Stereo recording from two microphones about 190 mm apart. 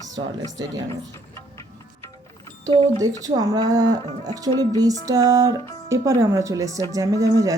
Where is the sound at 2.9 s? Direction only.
20° right (ahead or behind).